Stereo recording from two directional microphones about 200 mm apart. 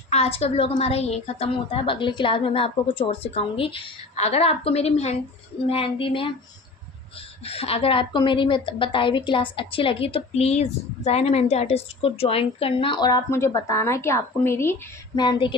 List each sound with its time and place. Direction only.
0.1 s a woman's voice: 30° left (ahead or behind)
7.4 s a woman's voice: 30° left (ahead or behind)